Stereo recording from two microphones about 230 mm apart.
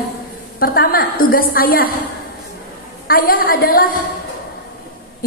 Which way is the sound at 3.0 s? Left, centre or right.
Left.